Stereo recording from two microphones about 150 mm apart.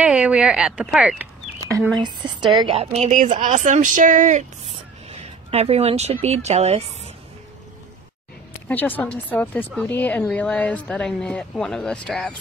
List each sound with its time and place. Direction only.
0.0 s speech: 5° right (ahead or behind)
2.0 s speech: 30° right (ahead or behind)
2.6 s a woman's voice: 40° right (ahead or behind)
5.1 s a sound: 45° right (ahead or behind)
6.2 s a woman's voice: 45° right (ahead or behind)
8.6 s a woman's voice: 10° left (ahead or behind)